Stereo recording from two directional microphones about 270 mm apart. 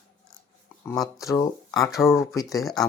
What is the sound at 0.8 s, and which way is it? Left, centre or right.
Speech, centre.